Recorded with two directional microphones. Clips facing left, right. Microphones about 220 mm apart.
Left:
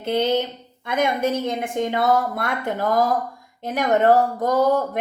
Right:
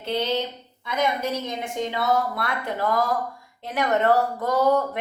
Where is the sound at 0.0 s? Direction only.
50° left (ahead or behind).